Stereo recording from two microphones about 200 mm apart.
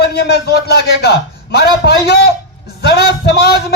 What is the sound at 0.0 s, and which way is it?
A man's voice, 55° left (ahead or behind).